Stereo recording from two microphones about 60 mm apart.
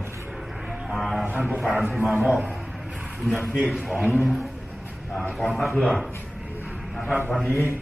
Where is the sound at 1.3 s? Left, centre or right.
Centre.